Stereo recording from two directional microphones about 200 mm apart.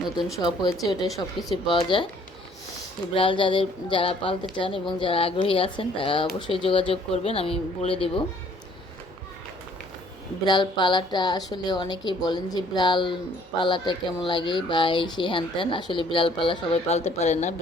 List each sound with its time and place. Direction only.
0.3 s speech: 20° left (ahead or behind)
3.2 s speech: 25° left (ahead or behind)
10.4 s speech: 20° left (ahead or behind)